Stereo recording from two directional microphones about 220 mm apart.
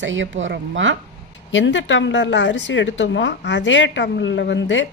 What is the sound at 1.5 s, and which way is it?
A woman's voice, 55° left (ahead or behind).